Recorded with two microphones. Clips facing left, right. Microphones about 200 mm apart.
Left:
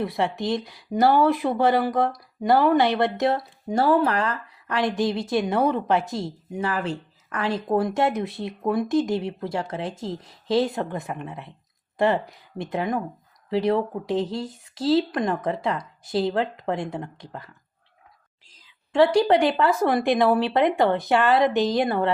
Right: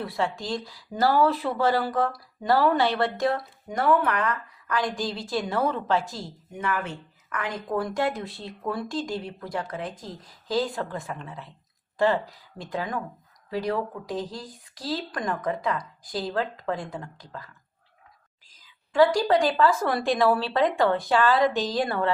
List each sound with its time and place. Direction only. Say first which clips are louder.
0.0 s speech: left 4 dB; 20° left (ahead or behind)
18.4 s whispering: left 4 dB; 25° left (ahead or behind)
19.1 s speech: left 3 dB; 25° left (ahead or behind)